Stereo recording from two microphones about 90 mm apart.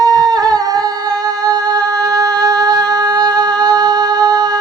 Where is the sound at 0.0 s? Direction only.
45° right (ahead or behind).